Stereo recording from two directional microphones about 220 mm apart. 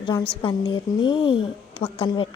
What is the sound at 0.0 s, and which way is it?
A woman's voice, 20° left (ahead or behind).